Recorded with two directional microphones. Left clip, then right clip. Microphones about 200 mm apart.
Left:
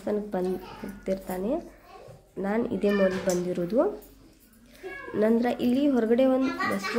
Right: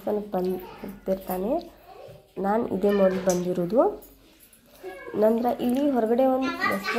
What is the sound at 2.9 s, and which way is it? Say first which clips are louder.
A woman's voice: right 4 dB; 10° left (ahead or behind).